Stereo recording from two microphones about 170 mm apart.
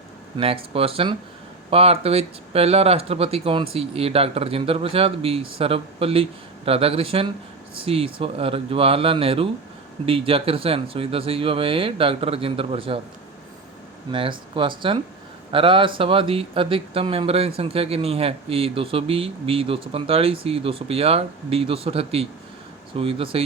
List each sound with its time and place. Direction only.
0.3 s speech: 35° right (ahead or behind)
14.1 s speech: 30° right (ahead or behind)